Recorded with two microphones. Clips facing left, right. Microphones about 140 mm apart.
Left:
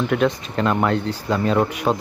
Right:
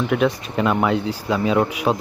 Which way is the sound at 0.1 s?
5° right (ahead or behind).